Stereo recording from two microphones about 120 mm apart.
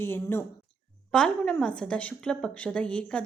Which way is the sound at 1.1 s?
5° left (ahead or behind).